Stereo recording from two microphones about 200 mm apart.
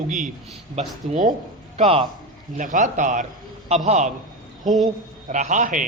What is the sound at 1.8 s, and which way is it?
Speech, 30° right (ahead or behind).